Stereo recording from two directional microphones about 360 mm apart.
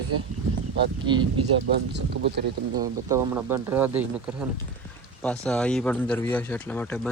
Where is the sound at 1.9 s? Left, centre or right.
Right.